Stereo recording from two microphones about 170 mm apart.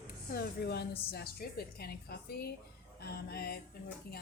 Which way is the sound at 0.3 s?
70° left (ahead or behind).